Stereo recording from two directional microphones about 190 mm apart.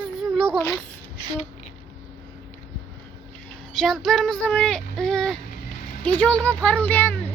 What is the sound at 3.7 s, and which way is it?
Speech, centre (ahead or behind).